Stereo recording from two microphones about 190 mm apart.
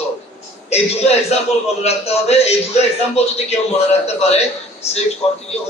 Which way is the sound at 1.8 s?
35° left (ahead or behind).